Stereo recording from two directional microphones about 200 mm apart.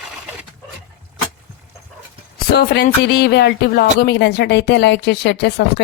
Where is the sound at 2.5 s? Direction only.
55° left (ahead or behind).